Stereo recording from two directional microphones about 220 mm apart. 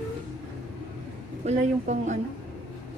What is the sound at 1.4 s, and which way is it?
Speech, 30° right (ahead or behind).